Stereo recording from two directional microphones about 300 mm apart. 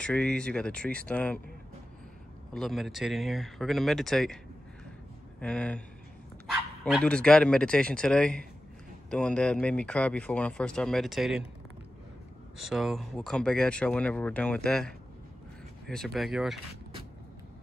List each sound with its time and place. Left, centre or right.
0.0 s speech: centre
2.5 s speech: centre
5.4 s speech: centre
12.5 s speech: centre